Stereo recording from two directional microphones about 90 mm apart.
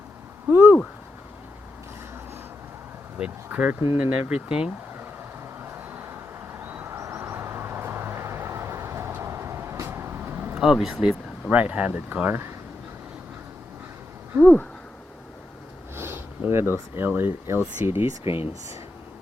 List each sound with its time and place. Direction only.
0.4 s a sound: 20° right (ahead or behind)
3.2 s speech: 15° right (ahead or behind)
5.6 s vehicle: 25° right (ahead or behind)
6.9 s vehicle: 35° right (ahead or behind)
10.6 s speech: 5° right (ahead or behind)
11.5 s speech: 15° right (ahead or behind)
14.3 s speech: 25° right (ahead or behind)
16.0 s sniff: 25° right (ahead or behind)
16.7 s speech: 25° right (ahead or behind)
18.2 s speech: 80° left